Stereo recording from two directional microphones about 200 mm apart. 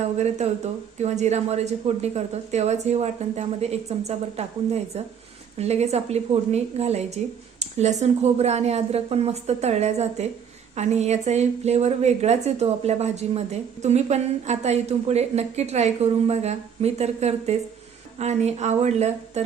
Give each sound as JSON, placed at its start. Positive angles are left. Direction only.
{"t": 0.9, "sound": "a woman's voice", "side_deg": -35}